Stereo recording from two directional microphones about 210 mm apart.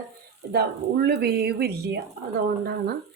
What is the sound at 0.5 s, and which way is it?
Speech, 50° right (ahead or behind).